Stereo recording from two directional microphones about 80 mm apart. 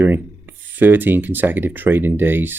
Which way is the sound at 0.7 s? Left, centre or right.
Right.